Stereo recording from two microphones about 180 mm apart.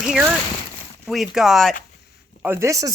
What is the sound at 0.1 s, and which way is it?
Speech, 5° right (ahead or behind).